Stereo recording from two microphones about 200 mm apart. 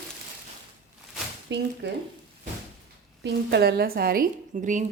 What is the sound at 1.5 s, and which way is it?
Speech, 60° right (ahead or behind).